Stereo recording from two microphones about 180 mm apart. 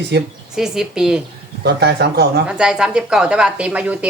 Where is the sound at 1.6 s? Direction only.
65° right (ahead or behind).